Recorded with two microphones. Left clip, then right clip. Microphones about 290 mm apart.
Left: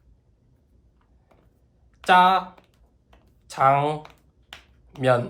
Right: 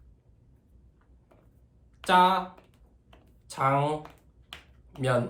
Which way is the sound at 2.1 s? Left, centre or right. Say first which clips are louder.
Left 5 dB; left.